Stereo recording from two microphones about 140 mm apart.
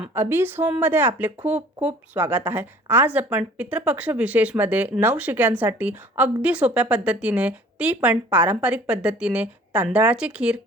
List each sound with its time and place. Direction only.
0.1 s speech: 15° right (ahead or behind)